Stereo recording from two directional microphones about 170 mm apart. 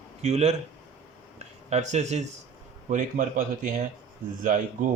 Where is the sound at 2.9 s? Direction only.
55° right (ahead or behind).